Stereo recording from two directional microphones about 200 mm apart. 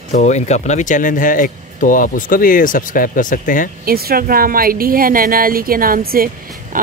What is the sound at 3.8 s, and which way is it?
Speech, 50° right (ahead or behind).